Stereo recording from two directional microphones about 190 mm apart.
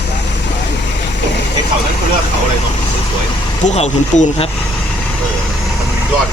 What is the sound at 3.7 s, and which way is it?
Speech, 35° left (ahead or behind).